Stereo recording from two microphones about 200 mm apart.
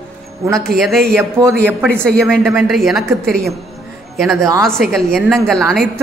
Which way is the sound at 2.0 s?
5° left (ahead or behind).